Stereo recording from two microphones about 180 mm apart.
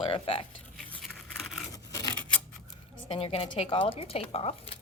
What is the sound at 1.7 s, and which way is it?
Scissors, 20° left (ahead or behind).